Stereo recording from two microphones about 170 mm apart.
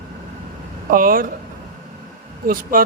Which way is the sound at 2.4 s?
55° right (ahead or behind).